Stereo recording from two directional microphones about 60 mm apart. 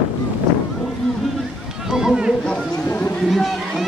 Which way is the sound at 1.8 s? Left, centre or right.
Centre.